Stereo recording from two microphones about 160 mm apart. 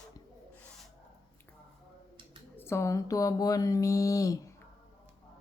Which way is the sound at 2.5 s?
15° left (ahead or behind).